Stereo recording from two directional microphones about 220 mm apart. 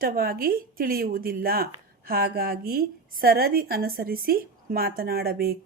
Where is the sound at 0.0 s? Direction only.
40° right (ahead or behind).